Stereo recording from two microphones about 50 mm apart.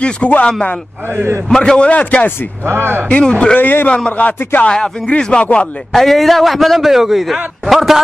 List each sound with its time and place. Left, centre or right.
0.0 s speech: left
1.6 s speech: left
2.6 s speech: right
3.1 s speech: left
3.5 s a man's voice: left
4.6 s speech: centre
5.9 s a man's voice: centre